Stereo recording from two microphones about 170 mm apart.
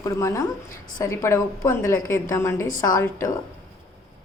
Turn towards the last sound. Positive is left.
turn(degrees=20)  # may be behind; listen again after turning